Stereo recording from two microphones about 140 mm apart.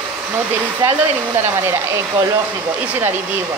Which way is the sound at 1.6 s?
20° right (ahead or behind).